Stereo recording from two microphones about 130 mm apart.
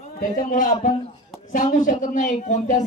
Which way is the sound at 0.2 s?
85° left.